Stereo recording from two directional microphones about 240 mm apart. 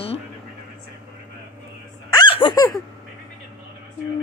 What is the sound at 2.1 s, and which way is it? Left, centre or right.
Hiccup, centre.